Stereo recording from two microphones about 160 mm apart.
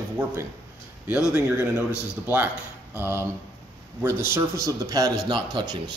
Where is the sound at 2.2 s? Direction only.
10° right (ahead or behind).